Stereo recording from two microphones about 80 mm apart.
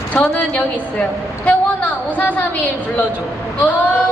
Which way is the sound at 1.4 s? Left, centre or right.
Left.